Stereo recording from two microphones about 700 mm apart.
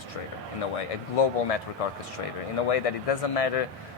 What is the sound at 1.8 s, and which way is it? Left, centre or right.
Speech, left.